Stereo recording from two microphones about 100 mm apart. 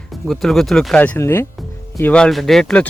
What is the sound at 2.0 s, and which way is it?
Speech, 10° left (ahead or behind).